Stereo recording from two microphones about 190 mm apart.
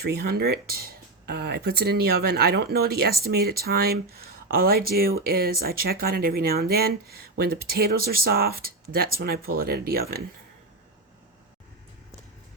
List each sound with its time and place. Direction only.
0.1 s speech: 55° right (ahead or behind)